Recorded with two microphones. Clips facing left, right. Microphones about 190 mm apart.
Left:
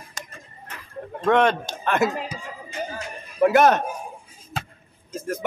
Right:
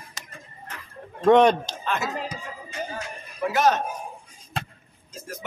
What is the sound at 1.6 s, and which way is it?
Speech, 60° left (ahead or behind).